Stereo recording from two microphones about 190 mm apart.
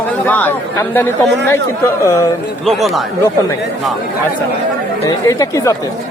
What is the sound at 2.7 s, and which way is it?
Speech, centre (ahead or behind).